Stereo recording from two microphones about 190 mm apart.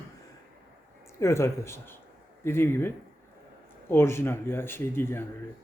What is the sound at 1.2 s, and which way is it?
Speech, 15° left (ahead or behind).